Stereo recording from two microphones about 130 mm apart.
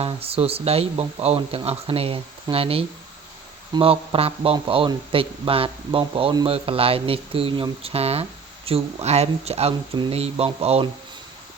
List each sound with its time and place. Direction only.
0.0 s speech: 50° right (ahead or behind)